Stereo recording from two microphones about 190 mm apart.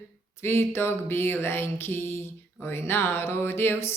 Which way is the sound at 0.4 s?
10° left (ahead or behind).